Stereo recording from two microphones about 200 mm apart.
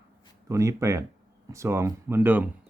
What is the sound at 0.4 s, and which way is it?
Speech, 15° right (ahead or behind).